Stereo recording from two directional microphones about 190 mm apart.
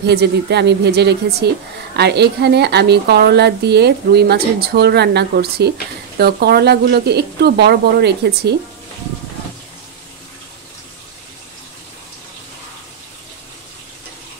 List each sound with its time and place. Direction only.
0.0 s a woman's voice: 60° right (ahead or behind)